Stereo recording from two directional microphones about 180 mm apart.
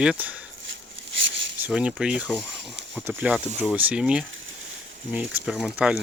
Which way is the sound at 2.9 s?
10° right (ahead or behind).